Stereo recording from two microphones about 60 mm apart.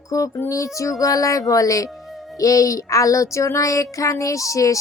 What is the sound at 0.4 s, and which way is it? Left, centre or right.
Speech, left.